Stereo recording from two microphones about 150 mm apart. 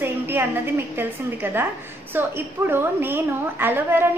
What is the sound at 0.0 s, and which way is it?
A woman's voice, 15° right (ahead or behind).